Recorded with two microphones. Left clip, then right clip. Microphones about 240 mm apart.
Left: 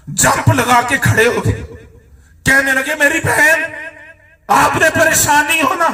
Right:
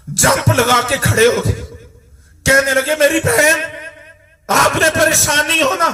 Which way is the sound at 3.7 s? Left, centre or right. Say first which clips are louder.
Left 2 dB; right.